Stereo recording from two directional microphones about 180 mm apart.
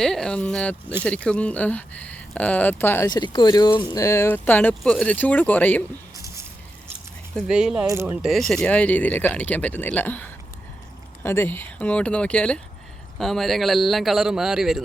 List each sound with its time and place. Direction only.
0.0 s speech: 5° left (ahead or behind)
6.1 s a sound: 15° right (ahead or behind)
7.3 s a man's voice: 5° right (ahead or behind)
8.2 s a man's voice: centre (ahead or behind)